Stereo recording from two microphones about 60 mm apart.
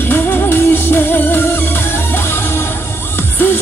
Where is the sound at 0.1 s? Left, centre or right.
Left.